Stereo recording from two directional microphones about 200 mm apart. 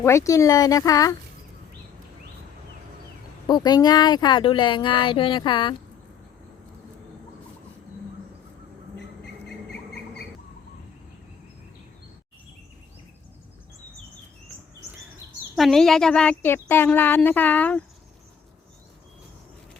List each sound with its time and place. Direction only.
0.0 s speech: 15° left (ahead or behind)
3.4 s speech: 20° left (ahead or behind)
15.5 s speech: centre (ahead or behind)